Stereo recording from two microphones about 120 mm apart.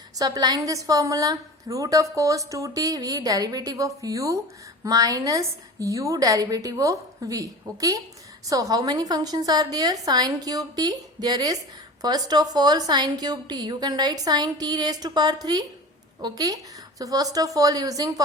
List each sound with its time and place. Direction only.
0.2 s a woman's voice: 30° right (ahead or behind)